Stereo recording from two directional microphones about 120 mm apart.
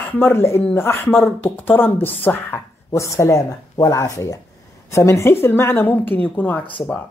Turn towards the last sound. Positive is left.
turn(degrees=15)  # may be behind; listen again after turning